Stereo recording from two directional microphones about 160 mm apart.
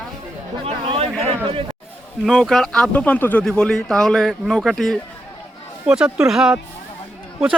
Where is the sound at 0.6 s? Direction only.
40° right (ahead or behind).